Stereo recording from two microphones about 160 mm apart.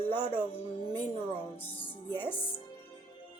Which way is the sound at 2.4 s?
35° left (ahead or behind).